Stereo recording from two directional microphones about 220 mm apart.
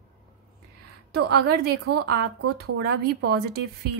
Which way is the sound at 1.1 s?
45° right (ahead or behind).